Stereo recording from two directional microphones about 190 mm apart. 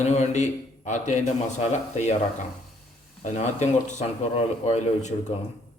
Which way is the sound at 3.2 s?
35° left (ahead or behind).